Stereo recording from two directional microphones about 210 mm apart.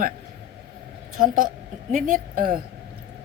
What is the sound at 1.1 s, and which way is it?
Speech, 40° right (ahead or behind).